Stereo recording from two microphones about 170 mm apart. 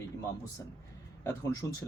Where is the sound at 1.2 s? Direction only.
15° left (ahead or behind).